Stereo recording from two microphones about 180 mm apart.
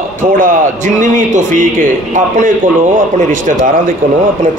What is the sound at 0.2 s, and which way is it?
A man's voice, 45° right (ahead or behind).